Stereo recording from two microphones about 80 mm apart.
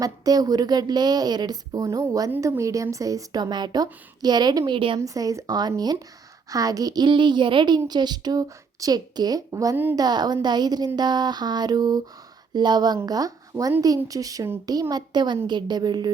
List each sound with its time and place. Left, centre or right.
0.0 s speech: right
1.8 s a woman's voice: right
4.9 s speech: right
5.5 s a woman's voice: right
7.9 s a woman's voice: right
9.5 s speech: right
9.9 s speech: right
13.1 s speech: right